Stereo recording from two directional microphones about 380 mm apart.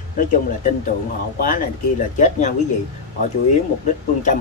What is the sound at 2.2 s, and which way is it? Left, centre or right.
Speech, centre.